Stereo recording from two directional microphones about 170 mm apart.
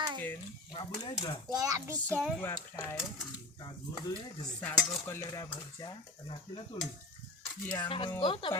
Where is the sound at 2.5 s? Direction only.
15° left (ahead or behind).